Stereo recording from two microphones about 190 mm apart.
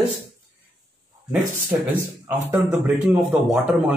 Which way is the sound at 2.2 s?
10° right (ahead or behind).